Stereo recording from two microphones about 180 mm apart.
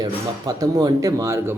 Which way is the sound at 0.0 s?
20° right (ahead or behind).